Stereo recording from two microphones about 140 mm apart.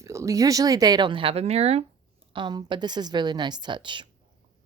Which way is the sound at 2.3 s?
30° right (ahead or behind).